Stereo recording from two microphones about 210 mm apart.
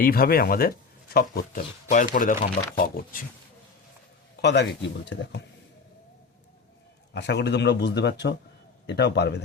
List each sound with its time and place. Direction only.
0.0 s speech: 45° left (ahead or behind)
4.4 s speech: 55° left (ahead or behind)
7.1 s a man's voice: 55° left (ahead or behind)